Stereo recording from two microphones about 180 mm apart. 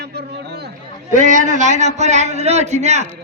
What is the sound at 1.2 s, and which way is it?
A man's voice, 45° right (ahead or behind).